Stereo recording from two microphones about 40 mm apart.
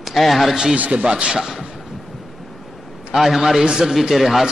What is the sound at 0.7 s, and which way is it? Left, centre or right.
Speech, right.